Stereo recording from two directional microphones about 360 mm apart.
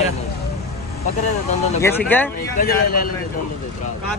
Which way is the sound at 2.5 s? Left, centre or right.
Left.